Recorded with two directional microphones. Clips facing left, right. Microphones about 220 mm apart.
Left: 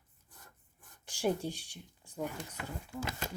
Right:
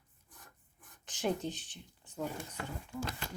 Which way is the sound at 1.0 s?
10° left (ahead or behind).